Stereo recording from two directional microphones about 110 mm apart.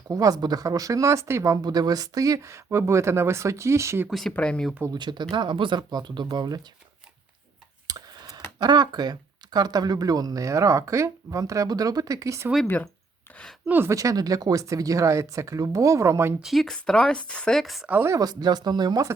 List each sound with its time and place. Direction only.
0.1 s speech: 35° right (ahead or behind)
4.1 s speech: centre (ahead or behind)
4.9 s speech: 45° right (ahead or behind)
7.9 s tick: 35° right (ahead or behind)
8.5 s speech: 40° right (ahead or behind)
13.7 s speech: 20° right (ahead or behind)
13.9 s speech: 30° right (ahead or behind)
16.4 s speech: centre (ahead or behind)
17.8 s speech: 20° right (ahead or behind); by 19.0 s 40° right (ahead or behind)